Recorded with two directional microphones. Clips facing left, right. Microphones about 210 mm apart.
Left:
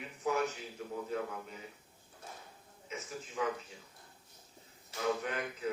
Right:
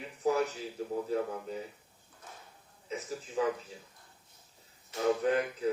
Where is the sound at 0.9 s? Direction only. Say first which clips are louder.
Right 5 dB; 35° right (ahead or behind).